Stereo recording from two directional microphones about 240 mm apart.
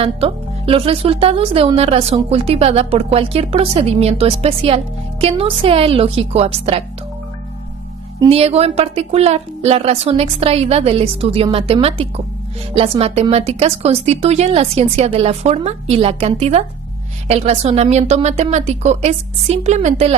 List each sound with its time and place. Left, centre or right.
0.0 s speech: right
8.2 s speech: right